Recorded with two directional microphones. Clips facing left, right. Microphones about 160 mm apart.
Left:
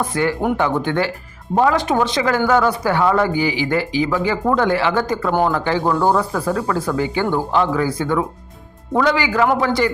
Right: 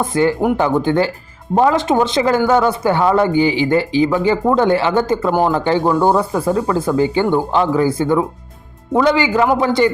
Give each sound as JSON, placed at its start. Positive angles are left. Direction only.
{"t": 0.0, "sound": "speech", "side_deg": -25}